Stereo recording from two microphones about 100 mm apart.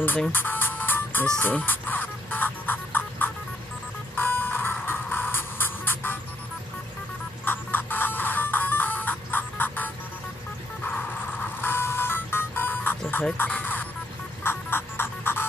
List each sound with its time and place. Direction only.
0.3 s music: 20° left (ahead or behind)
4.1 s buzzer: 20° left (ahead or behind)
4.8 s music: 20° left (ahead or behind)
7.4 s music: 20° left (ahead or behind)
11.6 s music: 20° left (ahead or behind)